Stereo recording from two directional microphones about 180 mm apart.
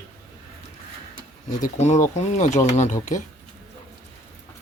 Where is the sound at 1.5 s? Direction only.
45° left (ahead or behind).